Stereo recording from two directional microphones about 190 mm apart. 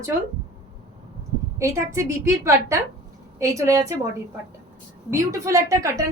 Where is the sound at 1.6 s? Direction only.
15° right (ahead or behind).